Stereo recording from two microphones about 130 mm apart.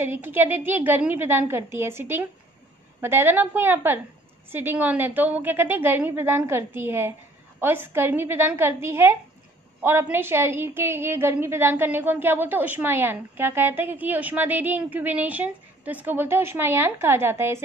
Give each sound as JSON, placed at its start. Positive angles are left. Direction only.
{"t": 0.0, "sound": "a woman's voice", "side_deg": -15}